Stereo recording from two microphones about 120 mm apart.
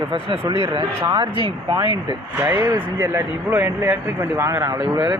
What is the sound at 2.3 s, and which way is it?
Speech, 20° right (ahead or behind).